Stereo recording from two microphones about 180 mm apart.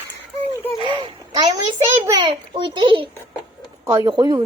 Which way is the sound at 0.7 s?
25° right (ahead or behind).